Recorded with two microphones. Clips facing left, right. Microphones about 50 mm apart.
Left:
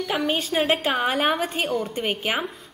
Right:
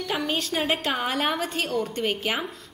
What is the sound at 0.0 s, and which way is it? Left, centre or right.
A woman's voice, centre.